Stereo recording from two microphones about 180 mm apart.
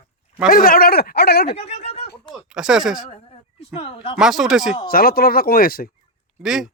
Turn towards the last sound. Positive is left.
turn(degrees=-5)  # may be behind; listen again after turning